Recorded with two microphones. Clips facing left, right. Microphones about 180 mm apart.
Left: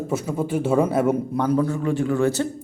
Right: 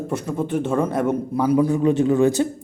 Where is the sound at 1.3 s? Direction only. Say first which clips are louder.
Right 3 dB; 10° right (ahead or behind).